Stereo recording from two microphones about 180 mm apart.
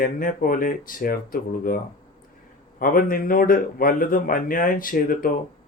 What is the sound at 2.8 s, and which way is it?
Speech, 50° left (ahead or behind).